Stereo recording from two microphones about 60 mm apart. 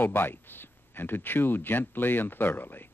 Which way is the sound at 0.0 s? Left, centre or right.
Left.